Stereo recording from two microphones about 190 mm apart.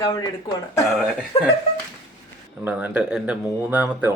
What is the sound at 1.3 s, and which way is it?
Speech, 30° left (ahead or behind).